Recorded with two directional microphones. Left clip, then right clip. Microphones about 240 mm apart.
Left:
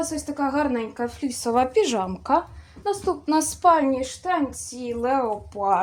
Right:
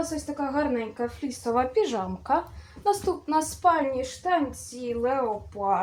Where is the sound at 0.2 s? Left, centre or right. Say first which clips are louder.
Left 6 dB; left.